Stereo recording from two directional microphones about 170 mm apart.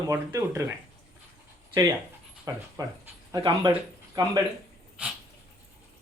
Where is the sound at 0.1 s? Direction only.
20° right (ahead or behind).